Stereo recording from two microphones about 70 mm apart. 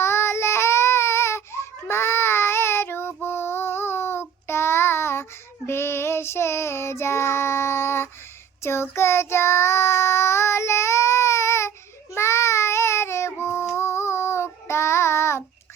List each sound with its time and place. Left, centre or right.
0.0 s child singing: left